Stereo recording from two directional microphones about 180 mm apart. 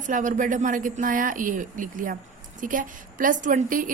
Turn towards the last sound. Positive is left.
turn(degrees=-45)  # may be behind; listen again after turning